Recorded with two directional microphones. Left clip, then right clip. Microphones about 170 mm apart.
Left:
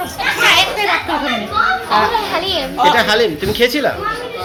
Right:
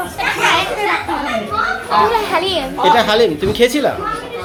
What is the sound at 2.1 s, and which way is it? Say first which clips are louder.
A child's voice: right 1 dB; 20° right (ahead or behind).